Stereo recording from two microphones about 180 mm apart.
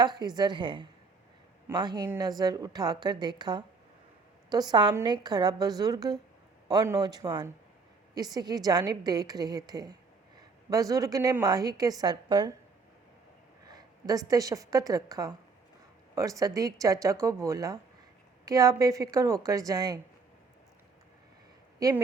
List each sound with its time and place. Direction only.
0.0 s a woman's voice: 25° right (ahead or behind)
13.7 s a woman's voice: 20° right (ahead or behind)
21.8 s a woman's voice: 20° right (ahead or behind)